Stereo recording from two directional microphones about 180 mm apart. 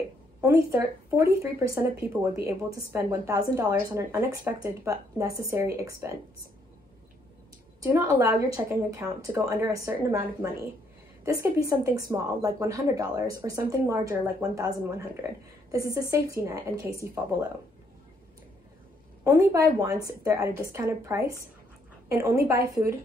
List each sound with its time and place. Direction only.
0.4 s a woman's voice: 15° right (ahead or behind)
7.8 s a woman's voice: 15° right (ahead or behind)
19.2 s a woman's voice: 15° right (ahead or behind)